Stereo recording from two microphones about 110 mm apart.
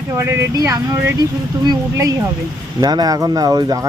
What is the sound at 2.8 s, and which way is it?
Speech, 40° right (ahead or behind).